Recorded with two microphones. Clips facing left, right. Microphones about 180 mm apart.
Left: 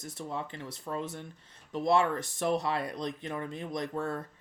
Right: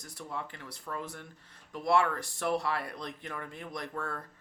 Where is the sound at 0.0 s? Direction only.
20° left (ahead or behind).